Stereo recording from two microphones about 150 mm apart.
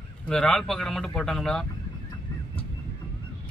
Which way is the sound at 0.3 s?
5° left (ahead or behind).